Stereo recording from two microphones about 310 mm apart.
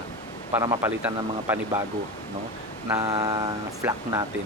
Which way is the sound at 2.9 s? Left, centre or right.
Centre.